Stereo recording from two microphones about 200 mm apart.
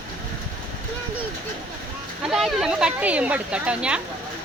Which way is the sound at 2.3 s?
Centre (ahead or behind).